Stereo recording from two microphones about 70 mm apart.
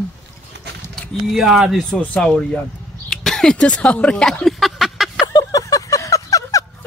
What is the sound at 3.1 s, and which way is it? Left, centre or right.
Speech, centre.